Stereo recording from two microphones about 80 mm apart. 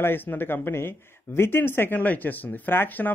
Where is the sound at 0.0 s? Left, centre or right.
Left.